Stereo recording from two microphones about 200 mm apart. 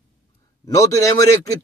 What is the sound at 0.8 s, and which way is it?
Speech, 15° left (ahead or behind).